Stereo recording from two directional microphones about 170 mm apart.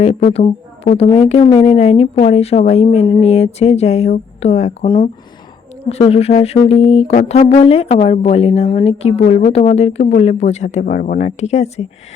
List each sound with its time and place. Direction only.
0.3 s a woman's voice: 35° left (ahead or behind)
5.9 s a woman's voice: 35° left (ahead or behind)